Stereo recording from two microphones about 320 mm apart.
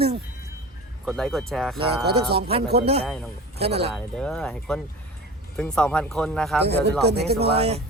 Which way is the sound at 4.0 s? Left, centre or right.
Centre.